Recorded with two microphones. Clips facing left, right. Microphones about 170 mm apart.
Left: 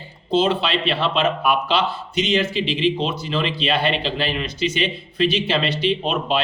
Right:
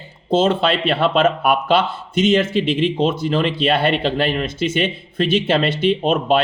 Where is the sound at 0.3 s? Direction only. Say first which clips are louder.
Right 3 dB; 45° right (ahead or behind).